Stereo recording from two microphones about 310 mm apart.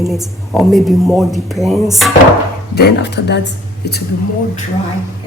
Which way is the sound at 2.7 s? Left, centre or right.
Left.